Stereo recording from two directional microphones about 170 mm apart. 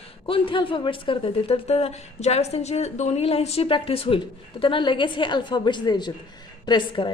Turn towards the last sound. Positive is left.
turn(degrees=30)  # may be behind; listen again after turning